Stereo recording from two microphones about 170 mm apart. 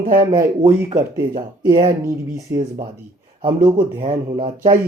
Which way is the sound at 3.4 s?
30° right (ahead or behind).